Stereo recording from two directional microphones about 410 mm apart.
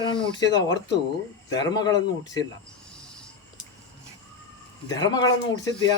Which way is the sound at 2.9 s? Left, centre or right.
Centre.